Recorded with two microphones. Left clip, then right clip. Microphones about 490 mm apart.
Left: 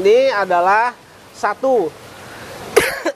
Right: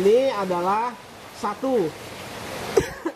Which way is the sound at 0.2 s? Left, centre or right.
Left.